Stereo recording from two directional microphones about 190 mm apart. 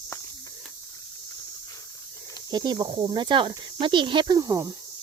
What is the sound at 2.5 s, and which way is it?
Speech, 20° right (ahead or behind).